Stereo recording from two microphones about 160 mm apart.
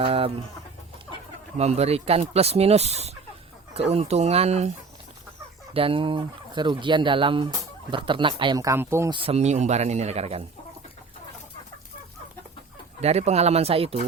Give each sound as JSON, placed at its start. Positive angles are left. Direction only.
{"t": 0.0, "sound": "chicken", "side_deg": -35}
{"t": 1.5, "sound": "speech", "side_deg": -40}
{"t": 5.7, "sound": "speech", "side_deg": -35}
{"t": 9.1, "sound": "speech", "side_deg": -40}
{"t": 13.0, "sound": "speech", "side_deg": -40}